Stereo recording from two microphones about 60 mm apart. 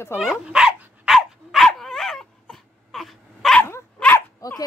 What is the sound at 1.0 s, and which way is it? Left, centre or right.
Dog, centre.